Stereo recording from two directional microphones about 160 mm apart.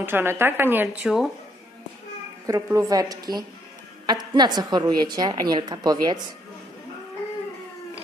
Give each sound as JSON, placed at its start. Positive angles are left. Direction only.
{"t": 0.0, "sound": "a woman's voice", "side_deg": -15}
{"t": 2.4, "sound": "a woman's voice", "side_deg": -20}